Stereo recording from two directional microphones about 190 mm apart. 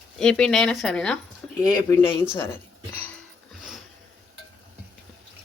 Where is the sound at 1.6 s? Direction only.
20° left (ahead or behind).